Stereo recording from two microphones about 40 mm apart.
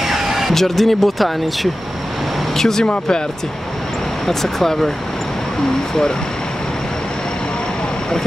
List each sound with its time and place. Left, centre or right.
0.0 s a sound: centre
0.6 s speech: centre
2.5 s speech: centre
4.3 s speech: centre